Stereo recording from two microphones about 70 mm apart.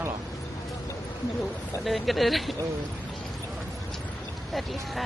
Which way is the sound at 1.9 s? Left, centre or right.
Centre.